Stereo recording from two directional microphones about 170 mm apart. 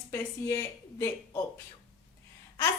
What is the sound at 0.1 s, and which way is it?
A woman's voice, 15° left (ahead or behind).